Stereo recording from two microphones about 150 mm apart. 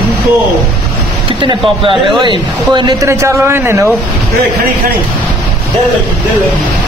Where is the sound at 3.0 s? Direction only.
20° right (ahead or behind).